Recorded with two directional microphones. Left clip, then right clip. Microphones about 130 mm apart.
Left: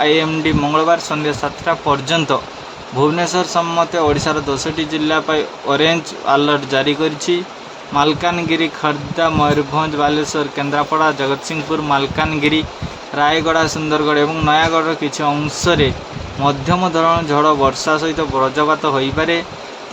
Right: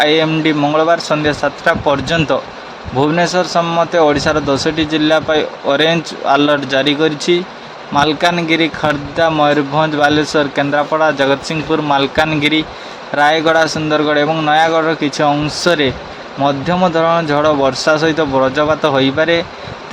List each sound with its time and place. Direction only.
0.0 s speech: 25° right (ahead or behind)